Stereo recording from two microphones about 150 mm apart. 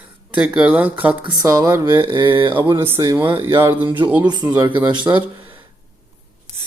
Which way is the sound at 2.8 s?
15° right (ahead or behind).